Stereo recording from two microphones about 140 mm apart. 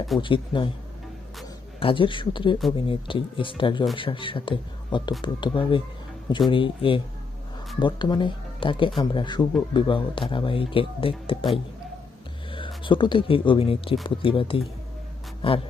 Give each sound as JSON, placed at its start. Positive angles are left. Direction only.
{"t": 0.2, "sound": "speech", "side_deg": 35}
{"t": 1.8, "sound": "speech", "side_deg": 40}
{"t": 12.5, "sound": "speech", "side_deg": 35}